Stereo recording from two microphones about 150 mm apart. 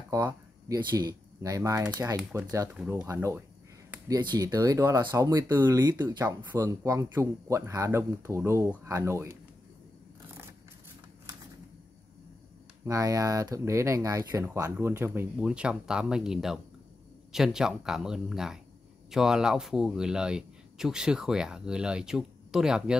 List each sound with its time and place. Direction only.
0.1 s speech: 20° right (ahead or behind)
2.7 s speech: 10° right (ahead or behind)
12.8 s speech: 20° right (ahead or behind); by 22.9 s 5° right (ahead or behind)